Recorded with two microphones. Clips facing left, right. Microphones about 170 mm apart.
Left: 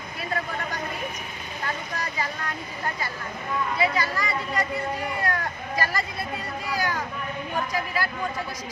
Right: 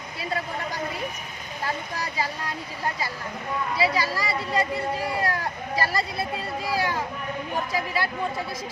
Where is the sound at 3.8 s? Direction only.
30° right (ahead or behind).